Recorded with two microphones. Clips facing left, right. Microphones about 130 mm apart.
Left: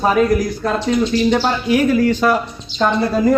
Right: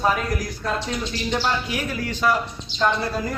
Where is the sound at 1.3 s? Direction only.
60° left (ahead or behind).